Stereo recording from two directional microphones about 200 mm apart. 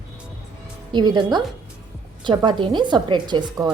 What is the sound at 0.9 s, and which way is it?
A woman's voice, 20° right (ahead or behind).